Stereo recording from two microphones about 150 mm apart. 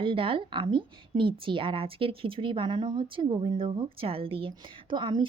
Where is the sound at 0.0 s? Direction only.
35° right (ahead or behind).